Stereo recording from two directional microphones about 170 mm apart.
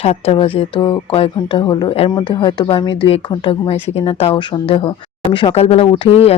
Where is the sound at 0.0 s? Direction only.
35° left (ahead or behind).